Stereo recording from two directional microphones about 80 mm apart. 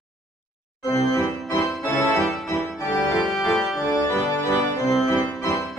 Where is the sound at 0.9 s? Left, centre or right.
Left.